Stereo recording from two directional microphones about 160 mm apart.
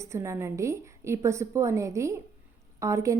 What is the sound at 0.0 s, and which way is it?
A woman's voice, 20° right (ahead or behind).